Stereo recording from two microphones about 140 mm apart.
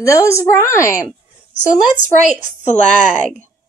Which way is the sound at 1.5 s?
60° left (ahead or behind).